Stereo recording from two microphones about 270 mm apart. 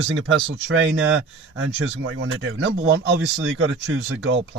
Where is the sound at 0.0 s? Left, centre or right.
Right.